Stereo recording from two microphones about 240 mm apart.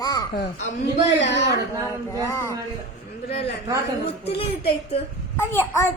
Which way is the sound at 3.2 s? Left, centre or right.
Left.